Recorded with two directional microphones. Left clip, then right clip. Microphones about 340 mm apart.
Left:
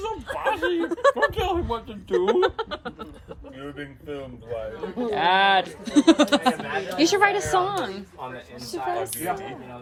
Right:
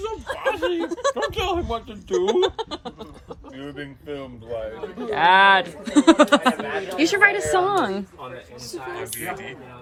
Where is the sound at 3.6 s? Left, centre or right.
Right.